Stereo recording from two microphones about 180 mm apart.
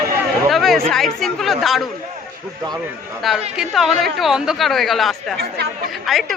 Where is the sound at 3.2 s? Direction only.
Centre (ahead or behind).